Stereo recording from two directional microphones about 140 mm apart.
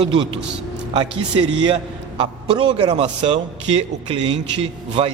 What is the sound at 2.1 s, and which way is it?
A man's voice, 35° right (ahead or behind).